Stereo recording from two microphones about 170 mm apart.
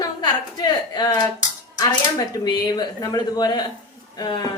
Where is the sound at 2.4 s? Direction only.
25° left (ahead or behind).